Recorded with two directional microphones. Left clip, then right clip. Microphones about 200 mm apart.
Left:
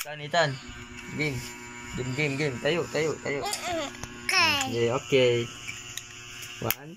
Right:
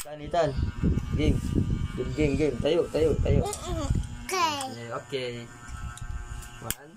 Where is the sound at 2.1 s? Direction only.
10° right (ahead or behind).